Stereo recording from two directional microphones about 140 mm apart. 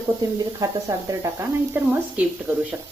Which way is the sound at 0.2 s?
25° right (ahead or behind).